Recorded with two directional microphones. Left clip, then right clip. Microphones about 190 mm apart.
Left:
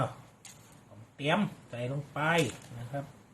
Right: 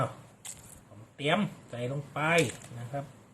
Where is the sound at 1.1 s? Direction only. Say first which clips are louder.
Right 1 dB; 25° right (ahead or behind).